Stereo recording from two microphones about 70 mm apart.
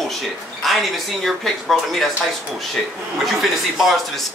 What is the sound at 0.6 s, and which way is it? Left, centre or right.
Speech, centre.